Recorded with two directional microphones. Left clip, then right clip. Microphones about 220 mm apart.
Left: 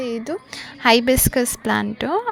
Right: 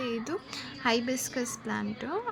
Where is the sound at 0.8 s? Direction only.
40° left (ahead or behind).